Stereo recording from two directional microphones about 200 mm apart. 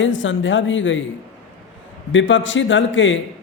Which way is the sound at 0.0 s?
70° left (ahead or behind).